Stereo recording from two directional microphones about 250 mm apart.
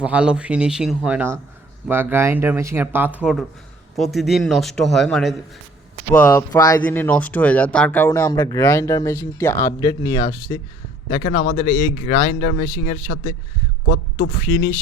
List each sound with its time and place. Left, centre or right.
0.0 s speech: centre
11.4 s speech: left
14.4 s speech: centre